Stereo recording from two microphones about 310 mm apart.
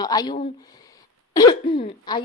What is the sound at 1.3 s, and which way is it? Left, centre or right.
Speech, centre.